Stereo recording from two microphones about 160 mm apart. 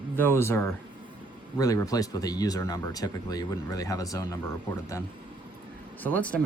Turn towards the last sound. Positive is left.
turn(degrees=10)  # may be behind; listen again after turning